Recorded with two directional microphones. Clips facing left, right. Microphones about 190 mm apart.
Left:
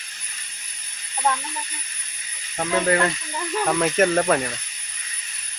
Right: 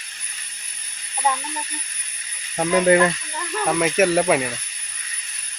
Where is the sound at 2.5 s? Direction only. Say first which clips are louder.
Right 5 dB; 20° right (ahead or behind).